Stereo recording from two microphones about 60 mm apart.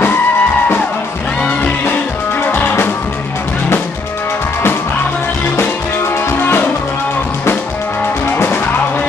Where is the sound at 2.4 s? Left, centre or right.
Left.